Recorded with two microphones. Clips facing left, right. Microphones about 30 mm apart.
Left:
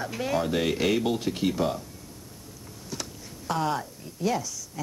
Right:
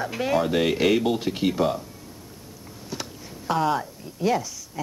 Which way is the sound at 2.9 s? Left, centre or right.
Centre.